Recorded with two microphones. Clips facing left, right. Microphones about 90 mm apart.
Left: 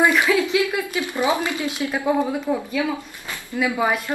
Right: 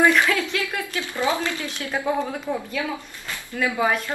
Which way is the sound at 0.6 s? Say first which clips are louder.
Left 5 dB; 15° left (ahead or behind).